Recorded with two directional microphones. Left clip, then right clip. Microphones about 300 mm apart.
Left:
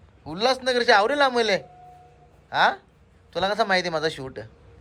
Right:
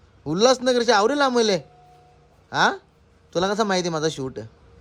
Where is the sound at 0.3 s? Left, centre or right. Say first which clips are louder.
Right 5 dB; right.